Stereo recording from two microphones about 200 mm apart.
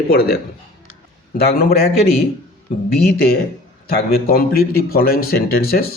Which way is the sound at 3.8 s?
50° left (ahead or behind).